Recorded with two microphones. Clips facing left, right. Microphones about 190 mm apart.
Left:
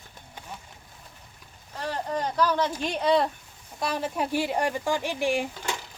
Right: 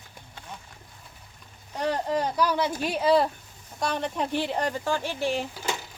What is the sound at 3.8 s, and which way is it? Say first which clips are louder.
Speech: even; 5° left (ahead or behind).